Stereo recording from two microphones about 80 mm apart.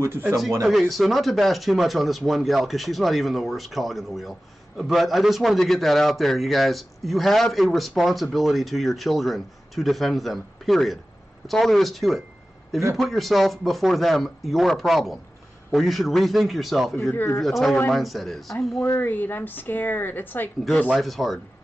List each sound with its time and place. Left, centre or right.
0.0 s speech: right
0.7 s a man's voice: centre
18.9 s a woman's voice: left
20.9 s a man's voice: centre